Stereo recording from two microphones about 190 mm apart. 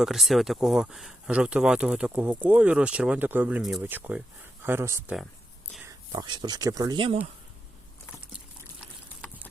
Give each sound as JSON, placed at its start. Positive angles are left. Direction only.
{"t": 0.0, "sound": "speech", "side_deg": 0}